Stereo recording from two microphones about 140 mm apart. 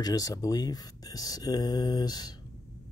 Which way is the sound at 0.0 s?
25° left (ahead or behind).